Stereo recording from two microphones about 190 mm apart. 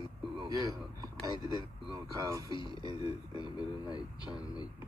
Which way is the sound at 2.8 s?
20° right (ahead or behind).